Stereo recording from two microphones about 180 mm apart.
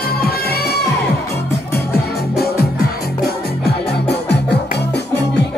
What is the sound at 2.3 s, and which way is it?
Music, 60° left (ahead or behind).